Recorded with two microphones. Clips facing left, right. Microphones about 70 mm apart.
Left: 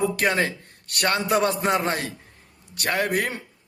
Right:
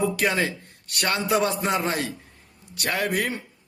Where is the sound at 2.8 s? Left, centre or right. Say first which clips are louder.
Left 1 dB; left.